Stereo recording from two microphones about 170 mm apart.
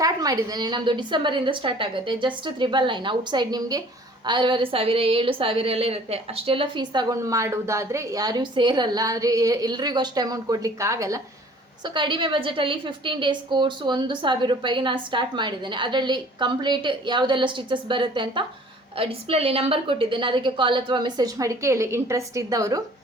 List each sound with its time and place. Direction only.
0.0 s a woman's voice: 20° right (ahead or behind)
11.9 s a woman's voice: 30° right (ahead or behind)